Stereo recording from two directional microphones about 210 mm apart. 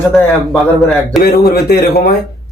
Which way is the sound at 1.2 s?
45° left (ahead or behind).